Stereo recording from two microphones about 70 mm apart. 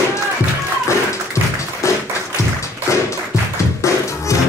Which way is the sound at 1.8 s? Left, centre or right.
Left.